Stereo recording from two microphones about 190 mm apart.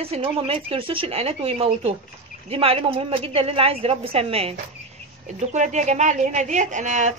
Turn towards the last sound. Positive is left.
turn(degrees=-40)  # may be behind; listen again after turning